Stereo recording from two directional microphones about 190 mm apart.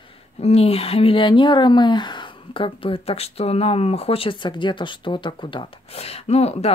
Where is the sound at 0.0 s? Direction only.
35° left (ahead or behind).